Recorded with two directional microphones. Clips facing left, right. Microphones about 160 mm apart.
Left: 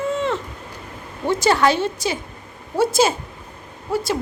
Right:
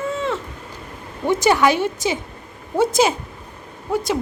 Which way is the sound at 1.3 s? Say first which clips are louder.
Right 1 dB; 20° right (ahead or behind).